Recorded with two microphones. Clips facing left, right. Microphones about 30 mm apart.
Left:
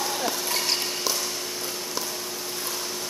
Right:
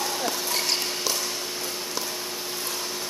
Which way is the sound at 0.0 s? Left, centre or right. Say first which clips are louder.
Even; centre.